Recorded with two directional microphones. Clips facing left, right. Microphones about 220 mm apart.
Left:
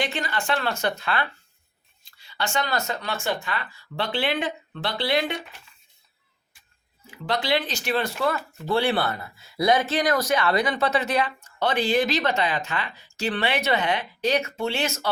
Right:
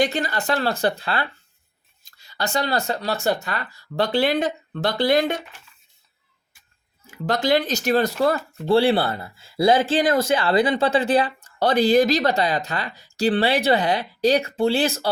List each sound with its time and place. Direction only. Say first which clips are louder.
0.0 s speech: right 6 dB; 40° right (ahead or behind)
2.0 s speech: right 2 dB; 45° right (ahead or behind)
7.1 s speech: right 5 dB; 45° right (ahead or behind)